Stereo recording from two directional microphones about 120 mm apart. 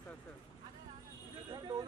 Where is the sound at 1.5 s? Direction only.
40° right (ahead or behind).